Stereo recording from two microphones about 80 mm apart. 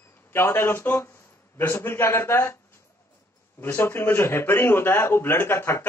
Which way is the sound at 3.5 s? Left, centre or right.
Left.